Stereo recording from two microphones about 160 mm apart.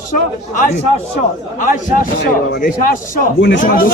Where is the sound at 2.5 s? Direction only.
60° left (ahead or behind).